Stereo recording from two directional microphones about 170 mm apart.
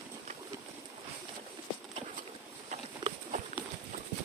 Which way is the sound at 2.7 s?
45° right (ahead or behind).